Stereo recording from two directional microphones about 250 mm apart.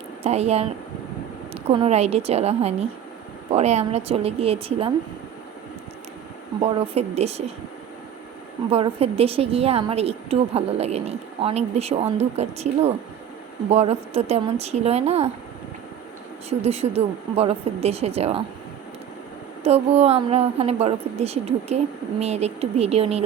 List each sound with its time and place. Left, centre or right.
0.2 s a woman's voice: right
6.6 s a woman's voice: right
8.7 s a woman's voice: right
16.5 s a woman's voice: right
19.6 s a woman's voice: right